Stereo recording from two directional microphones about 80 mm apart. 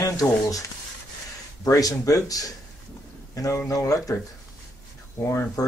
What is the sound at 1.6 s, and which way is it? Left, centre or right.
Speech, left.